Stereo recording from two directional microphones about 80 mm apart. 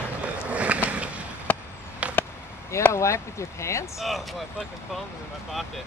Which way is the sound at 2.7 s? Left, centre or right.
Left.